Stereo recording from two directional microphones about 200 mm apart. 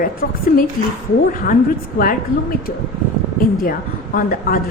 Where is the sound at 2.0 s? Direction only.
45° left (ahead or behind).